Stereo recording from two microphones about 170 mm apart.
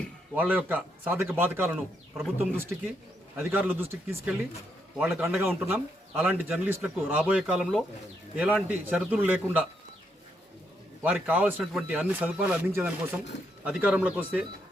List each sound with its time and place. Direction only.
0.3 s speech: 10° right (ahead or behind)
11.0 s speech: 10° right (ahead or behind)